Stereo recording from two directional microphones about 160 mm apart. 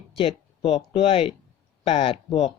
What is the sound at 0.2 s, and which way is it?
Speech, 35° left (ahead or behind).